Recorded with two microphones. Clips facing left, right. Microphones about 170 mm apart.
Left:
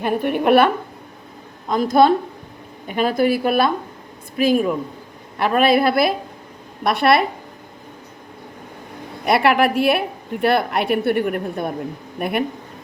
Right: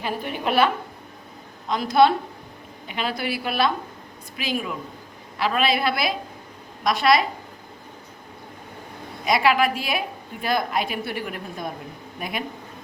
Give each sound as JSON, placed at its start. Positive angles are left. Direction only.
{"t": 0.0, "sound": "a woman's voice", "side_deg": 55}
{"t": 1.7, "sound": "a woman's voice", "side_deg": 45}
{"t": 9.2, "sound": "a woman's voice", "side_deg": 60}